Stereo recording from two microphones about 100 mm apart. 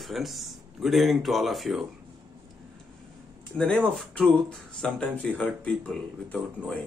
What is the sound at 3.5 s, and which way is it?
Speech, 10° left (ahead or behind).